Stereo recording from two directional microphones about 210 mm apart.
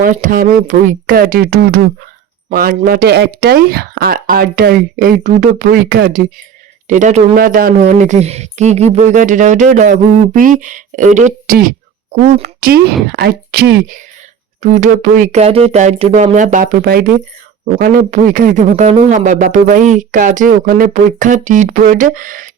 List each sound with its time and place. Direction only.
0.0 s speech: 40° right (ahead or behind)